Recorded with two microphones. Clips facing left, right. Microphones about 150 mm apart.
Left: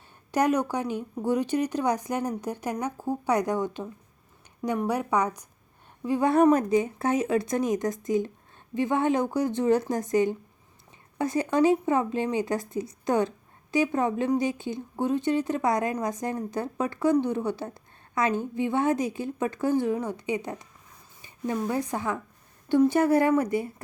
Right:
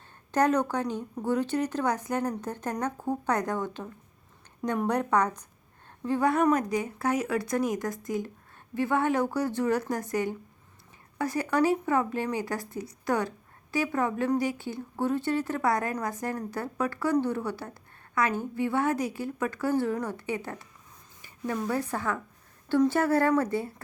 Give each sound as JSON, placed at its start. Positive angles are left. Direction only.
{"t": 0.3, "sound": "speech", "side_deg": 10}
{"t": 4.8, "sound": "speech", "side_deg": 5}
{"t": 6.3, "sound": "speech", "side_deg": 30}